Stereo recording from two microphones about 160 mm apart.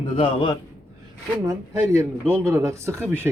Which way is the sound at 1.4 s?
20° right (ahead or behind).